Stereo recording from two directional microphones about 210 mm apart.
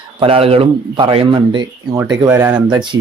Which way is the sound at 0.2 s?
25° right (ahead or behind).